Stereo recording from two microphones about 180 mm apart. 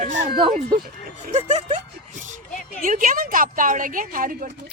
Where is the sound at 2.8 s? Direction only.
50° right (ahead or behind).